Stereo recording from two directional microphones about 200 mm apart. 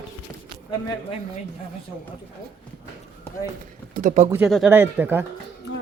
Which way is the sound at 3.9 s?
40° right (ahead or behind).